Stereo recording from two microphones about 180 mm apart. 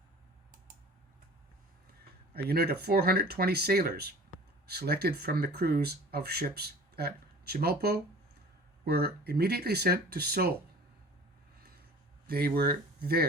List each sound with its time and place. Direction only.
2.3 s speech: 60° right (ahead or behind)
12.3 s speech: 60° right (ahead or behind)